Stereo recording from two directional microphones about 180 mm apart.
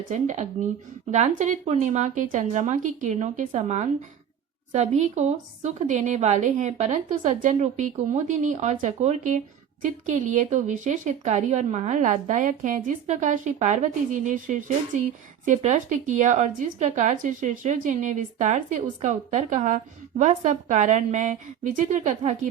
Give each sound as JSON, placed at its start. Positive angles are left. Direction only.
{"t": 0.1, "sound": "a woman's voice", "side_deg": -40}